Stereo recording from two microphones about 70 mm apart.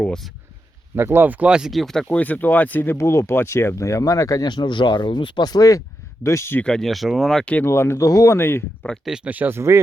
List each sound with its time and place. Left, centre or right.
0.9 s speech: right
1.5 s speech: centre
1.7 s speech: centre
2.0 s speech: left
4.4 s speech: left
6.2 s speech: left
6.6 s speech: centre
7.6 s speech: left
8.4 s speech: left
8.8 s speech: left
9.2 s speech: right
9.6 s speech: right